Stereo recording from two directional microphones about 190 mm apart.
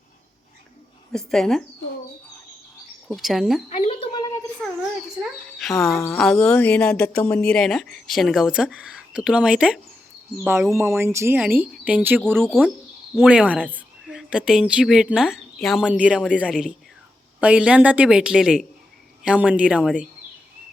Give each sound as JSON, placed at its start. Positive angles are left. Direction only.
{"t": 1.1, "sound": "speech", "side_deg": 0}
{"t": 3.1, "sound": "speech", "side_deg": 0}
{"t": 3.7, "sound": "speech", "side_deg": 30}
{"t": 4.6, "sound": "speech", "side_deg": 0}
{"t": 5.9, "sound": "speech", "side_deg": 15}
{"t": 6.1, "sound": "speech", "side_deg": 5}